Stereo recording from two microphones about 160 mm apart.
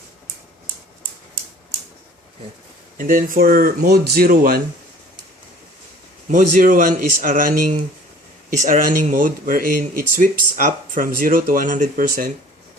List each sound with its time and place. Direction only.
3.0 s speech: 55° right (ahead or behind)
6.3 s speech: 50° right (ahead or behind)